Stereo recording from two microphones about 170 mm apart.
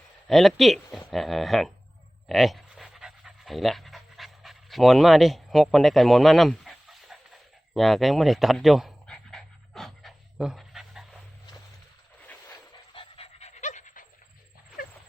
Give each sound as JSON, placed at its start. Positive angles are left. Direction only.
{"t": 0.3, "sound": "speech", "side_deg": 0}
{"t": 2.2, "sound": "dog", "side_deg": 0}
{"t": 7.7, "sound": "pant", "side_deg": 0}
{"t": 12.9, "sound": "dog", "side_deg": 30}